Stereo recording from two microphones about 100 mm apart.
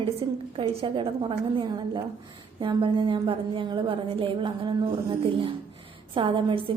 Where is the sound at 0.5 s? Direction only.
75° right (ahead or behind).